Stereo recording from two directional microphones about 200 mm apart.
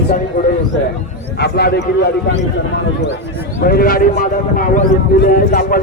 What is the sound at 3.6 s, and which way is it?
A man's voice, 50° left (ahead or behind).